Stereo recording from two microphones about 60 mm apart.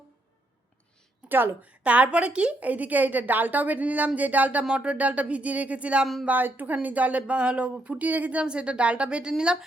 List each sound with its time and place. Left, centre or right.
1.3 s a woman's voice: right
4.6 s a woman's voice: centre